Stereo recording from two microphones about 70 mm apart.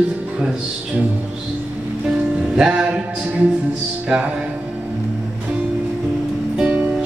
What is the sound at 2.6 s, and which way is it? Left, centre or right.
Music, centre.